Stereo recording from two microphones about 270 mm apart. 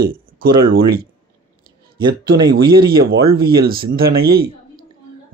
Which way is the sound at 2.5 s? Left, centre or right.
Right.